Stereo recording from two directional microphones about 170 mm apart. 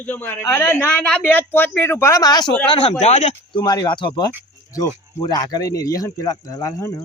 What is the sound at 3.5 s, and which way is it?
Speech, 25° left (ahead or behind).